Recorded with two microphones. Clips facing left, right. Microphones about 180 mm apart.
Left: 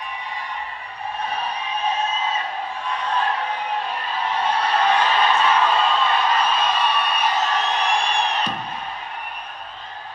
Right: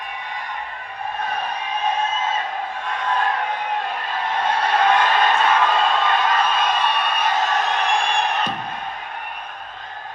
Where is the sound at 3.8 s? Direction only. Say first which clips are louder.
Even; 50° right (ahead or behind).